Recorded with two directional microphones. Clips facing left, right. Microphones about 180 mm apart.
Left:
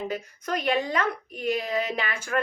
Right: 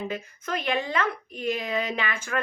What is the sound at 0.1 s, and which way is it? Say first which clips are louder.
A woman's voice: left 1 dB; 40° left (ahead or behind).